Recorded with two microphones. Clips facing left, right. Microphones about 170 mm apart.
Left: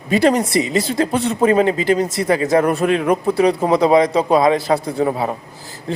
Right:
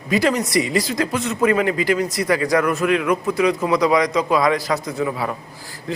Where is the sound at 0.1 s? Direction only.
30° left (ahead or behind).